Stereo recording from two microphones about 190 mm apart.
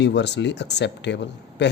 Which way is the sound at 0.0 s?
65° left (ahead or behind).